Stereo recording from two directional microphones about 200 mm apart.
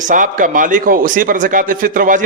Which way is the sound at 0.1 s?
40° right (ahead or behind).